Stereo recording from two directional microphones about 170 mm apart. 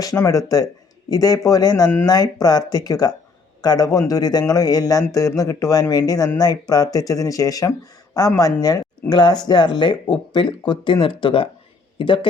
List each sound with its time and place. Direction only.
0.0 s speech: 20° left (ahead or behind)